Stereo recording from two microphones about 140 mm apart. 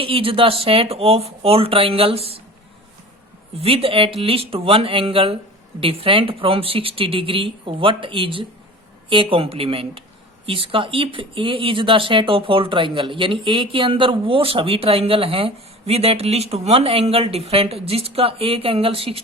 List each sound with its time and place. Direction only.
0.0 s speech: 40° right (ahead or behind)
3.6 s speech: 45° right (ahead or behind)